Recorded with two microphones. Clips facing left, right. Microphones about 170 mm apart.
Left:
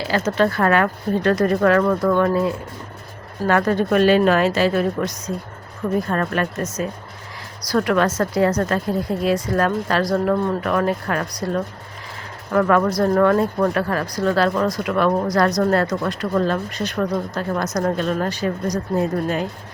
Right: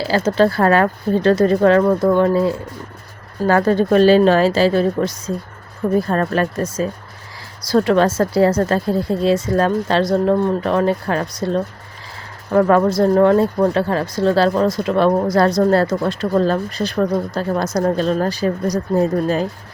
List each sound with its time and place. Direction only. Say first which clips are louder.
0.0 s a woman's voice: right 4 dB; 30° right (ahead or behind)